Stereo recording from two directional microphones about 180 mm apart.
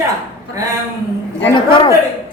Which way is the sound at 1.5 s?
25° left (ahead or behind).